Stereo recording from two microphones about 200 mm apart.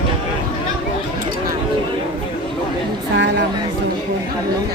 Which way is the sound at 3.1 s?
65° right (ahead or behind).